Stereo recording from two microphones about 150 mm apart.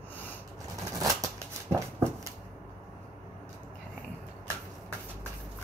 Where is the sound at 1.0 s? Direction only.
20° right (ahead or behind).